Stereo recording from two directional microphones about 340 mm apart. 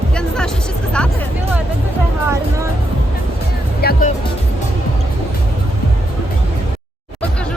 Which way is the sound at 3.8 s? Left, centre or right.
Left.